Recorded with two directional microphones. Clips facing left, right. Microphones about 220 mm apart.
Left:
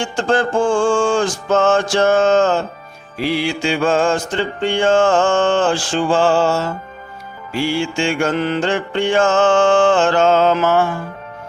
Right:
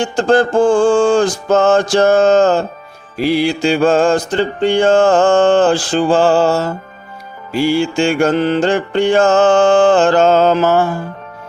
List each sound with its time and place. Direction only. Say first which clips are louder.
0.0 s mantra: right 5 dB; 35° right (ahead or behind)